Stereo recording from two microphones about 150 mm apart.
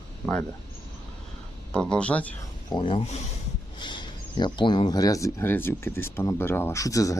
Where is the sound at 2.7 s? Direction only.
35° left (ahead or behind).